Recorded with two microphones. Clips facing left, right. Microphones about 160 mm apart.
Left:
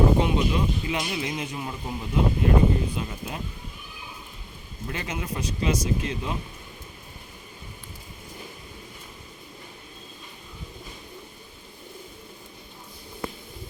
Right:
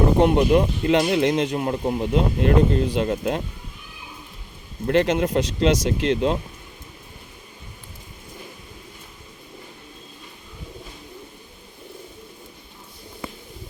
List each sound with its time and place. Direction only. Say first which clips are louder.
0.2 s speech: right 7 dB; 60° right (ahead or behind)
4.9 s speech: right 14 dB; 75° right (ahead or behind)